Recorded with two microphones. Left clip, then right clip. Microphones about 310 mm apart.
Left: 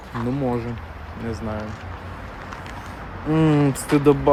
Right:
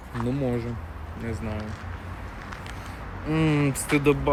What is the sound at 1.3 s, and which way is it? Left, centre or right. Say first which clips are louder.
Speech: left 6 dB; left.